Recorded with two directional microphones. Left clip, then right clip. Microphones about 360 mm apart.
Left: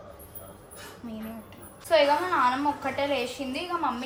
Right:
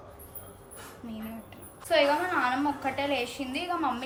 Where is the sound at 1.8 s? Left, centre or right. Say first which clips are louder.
Left 2 dB; centre.